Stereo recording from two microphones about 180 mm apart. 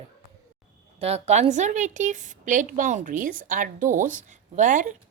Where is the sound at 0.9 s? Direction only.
35° right (ahead or behind).